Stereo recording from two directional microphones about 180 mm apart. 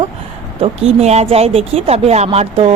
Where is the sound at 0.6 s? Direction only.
35° right (ahead or behind).